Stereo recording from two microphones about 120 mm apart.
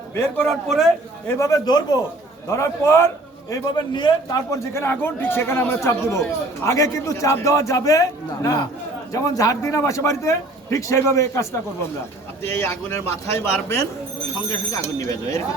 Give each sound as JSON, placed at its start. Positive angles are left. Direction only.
{"t": 0.1, "sound": "a man's voice", "side_deg": 20}
{"t": 0.4, "sound": "a man's voice", "side_deg": 0}
{"t": 1.4, "sound": "a man's voice", "side_deg": 30}
{"t": 3.5, "sound": "a man's voice", "side_deg": 35}